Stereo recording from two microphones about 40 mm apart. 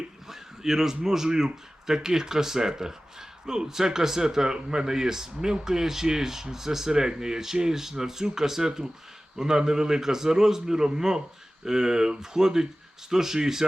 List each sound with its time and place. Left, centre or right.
0.3 s speech: centre